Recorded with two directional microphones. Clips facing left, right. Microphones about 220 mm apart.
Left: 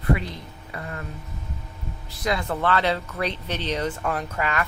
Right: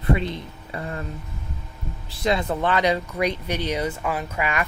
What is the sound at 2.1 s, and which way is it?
Speech, 25° right (ahead or behind).